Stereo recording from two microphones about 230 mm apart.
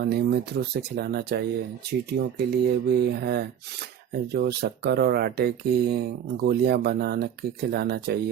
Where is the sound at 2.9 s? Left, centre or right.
Right.